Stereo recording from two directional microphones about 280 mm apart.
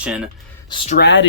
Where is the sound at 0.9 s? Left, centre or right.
Left.